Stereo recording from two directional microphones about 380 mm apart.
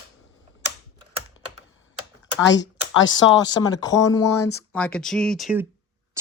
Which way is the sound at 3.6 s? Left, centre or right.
Centre.